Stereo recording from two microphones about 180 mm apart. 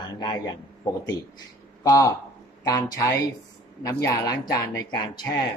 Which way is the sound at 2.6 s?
20° left (ahead or behind).